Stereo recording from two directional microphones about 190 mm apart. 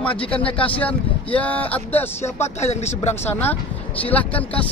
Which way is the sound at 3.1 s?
10° left (ahead or behind).